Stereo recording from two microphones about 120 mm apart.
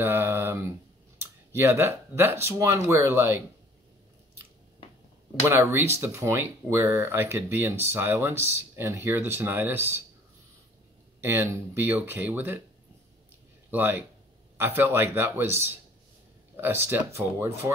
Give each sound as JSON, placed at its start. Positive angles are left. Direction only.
{"t": 0.0, "sound": "speech", "side_deg": -20}
{"t": 5.5, "sound": "speech", "side_deg": -20}
{"t": 11.2, "sound": "speech", "side_deg": -20}
{"t": 13.7, "sound": "speech", "side_deg": -15}